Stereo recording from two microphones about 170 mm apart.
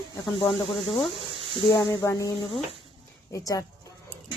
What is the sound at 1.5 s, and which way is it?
A woman's voice, 25° left (ahead or behind).